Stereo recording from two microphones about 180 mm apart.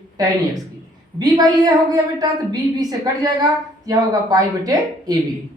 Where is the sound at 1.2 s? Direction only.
20° right (ahead or behind).